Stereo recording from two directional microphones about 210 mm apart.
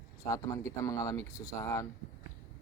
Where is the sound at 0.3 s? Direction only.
15° left (ahead or behind).